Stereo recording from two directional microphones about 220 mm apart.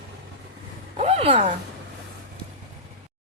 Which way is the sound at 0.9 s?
30° right (ahead or behind).